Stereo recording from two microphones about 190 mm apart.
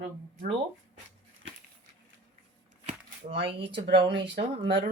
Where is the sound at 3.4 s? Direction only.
30° right (ahead or behind).